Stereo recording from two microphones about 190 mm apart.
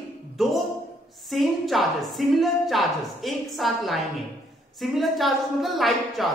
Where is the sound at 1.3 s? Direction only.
Centre (ahead or behind).